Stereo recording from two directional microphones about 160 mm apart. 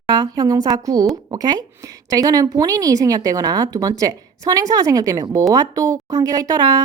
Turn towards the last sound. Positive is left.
turn(degrees=-20)  # may be behind; listen again after turning